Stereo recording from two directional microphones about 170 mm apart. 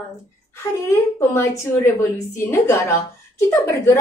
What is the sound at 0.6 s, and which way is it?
A woman's voice, 15° left (ahead or behind).